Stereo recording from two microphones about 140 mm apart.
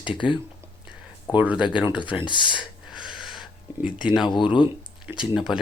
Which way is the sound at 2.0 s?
35° left (ahead or behind).